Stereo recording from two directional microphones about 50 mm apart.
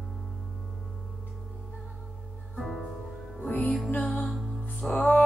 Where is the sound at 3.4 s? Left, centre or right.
Left.